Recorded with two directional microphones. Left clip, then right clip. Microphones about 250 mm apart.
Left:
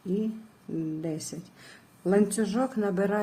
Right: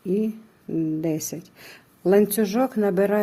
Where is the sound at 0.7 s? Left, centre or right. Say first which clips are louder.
Right 8 dB; right.